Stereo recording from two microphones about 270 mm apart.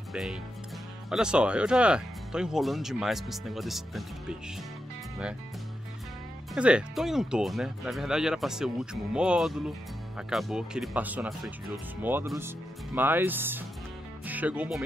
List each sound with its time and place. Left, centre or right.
0.1 s speech: centre
6.5 s speech: centre